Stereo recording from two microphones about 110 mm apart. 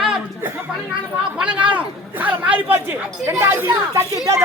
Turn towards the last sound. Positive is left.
turn(degrees=-25)  # may be behind; listen again after turning